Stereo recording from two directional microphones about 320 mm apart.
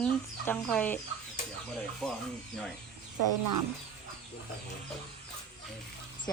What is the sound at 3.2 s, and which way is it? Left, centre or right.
Speech, right.